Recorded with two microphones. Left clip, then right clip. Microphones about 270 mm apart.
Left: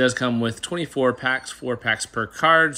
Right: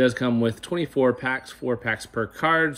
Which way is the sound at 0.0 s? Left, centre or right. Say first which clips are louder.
Left 1 dB; centre.